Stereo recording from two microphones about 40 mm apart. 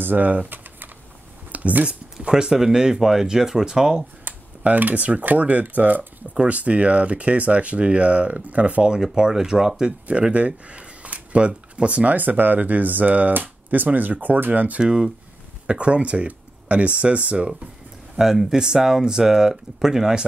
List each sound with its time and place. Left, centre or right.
0.0 s speech: right
1.5 s a sound: right
1.9 s speech: right
4.2 s speech: right
9.0 s speech: centre
10.0 s speech: right
12.2 s speech: right
14.8 s speech: centre
18.1 s speech: centre